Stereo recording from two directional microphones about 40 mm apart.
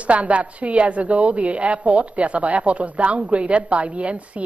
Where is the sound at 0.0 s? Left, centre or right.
Right.